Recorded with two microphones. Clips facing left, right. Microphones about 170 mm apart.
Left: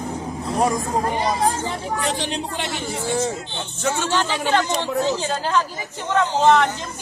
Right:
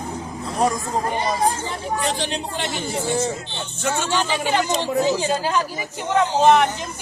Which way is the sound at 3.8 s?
5° right (ahead or behind).